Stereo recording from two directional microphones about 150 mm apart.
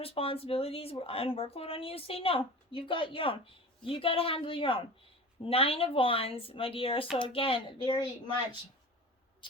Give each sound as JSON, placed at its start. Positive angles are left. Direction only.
{"t": 0.0, "sound": "speech", "side_deg": 40}